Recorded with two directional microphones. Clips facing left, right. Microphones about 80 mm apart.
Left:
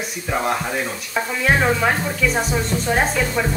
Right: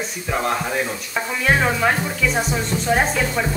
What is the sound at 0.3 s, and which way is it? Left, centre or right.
Speech, centre.